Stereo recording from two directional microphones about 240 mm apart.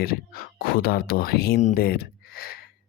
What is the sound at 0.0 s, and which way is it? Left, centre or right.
Speech, left.